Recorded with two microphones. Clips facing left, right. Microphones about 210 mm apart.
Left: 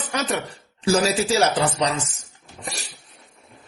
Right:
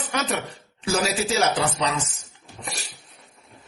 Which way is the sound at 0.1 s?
35° left (ahead or behind).